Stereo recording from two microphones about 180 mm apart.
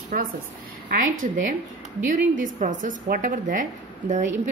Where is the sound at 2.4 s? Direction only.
45° right (ahead or behind).